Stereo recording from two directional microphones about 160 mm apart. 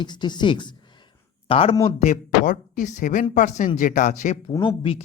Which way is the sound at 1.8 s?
50° left (ahead or behind).